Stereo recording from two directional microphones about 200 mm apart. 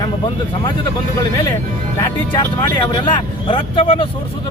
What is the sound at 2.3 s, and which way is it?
Speech, 20° left (ahead or behind).